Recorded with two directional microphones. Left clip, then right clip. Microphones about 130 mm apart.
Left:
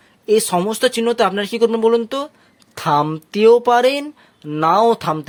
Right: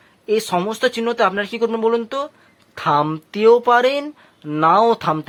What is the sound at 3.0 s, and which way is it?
Speech, 30° left (ahead or behind).